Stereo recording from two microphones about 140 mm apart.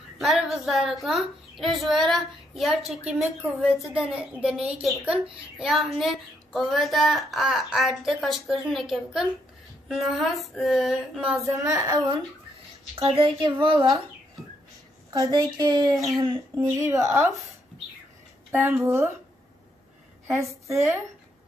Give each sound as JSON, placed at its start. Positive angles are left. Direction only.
{"t": 0.2, "sound": "a child's voice", "side_deg": 0}
{"t": 11.3, "sound": "speech", "side_deg": -20}
{"t": 12.9, "sound": "a woman's voice", "side_deg": -45}
{"t": 15.1, "sound": "a woman's voice", "side_deg": -25}
{"t": 18.5, "sound": "a woman's voice", "side_deg": -15}
{"t": 20.2, "sound": "speech", "side_deg": -20}